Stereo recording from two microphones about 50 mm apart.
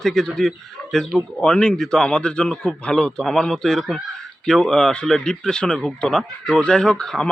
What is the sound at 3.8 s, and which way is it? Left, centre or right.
A man's voice, centre.